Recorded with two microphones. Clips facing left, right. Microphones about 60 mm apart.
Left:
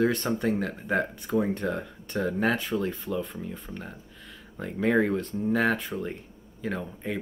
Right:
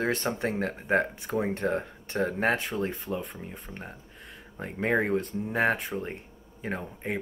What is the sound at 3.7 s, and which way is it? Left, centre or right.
Speech, right.